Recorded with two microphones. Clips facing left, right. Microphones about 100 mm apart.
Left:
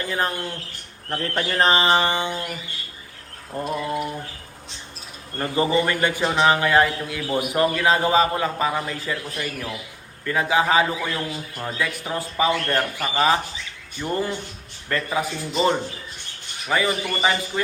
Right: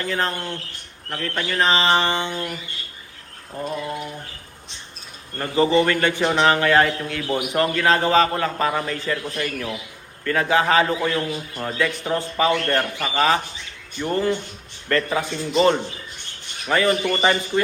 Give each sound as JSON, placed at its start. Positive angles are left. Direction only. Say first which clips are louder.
{"t": 0.0, "sound": "speech", "louder": "right 1 dB", "side_deg": 15}
{"t": 1.1, "sound": "speech", "louder": "left 1 dB", "side_deg": 20}
{"t": 3.5, "sound": "speech", "louder": "left 2 dB", "side_deg": 10}
{"t": 5.4, "sound": "speech", "louder": "right 3 dB", "side_deg": 15}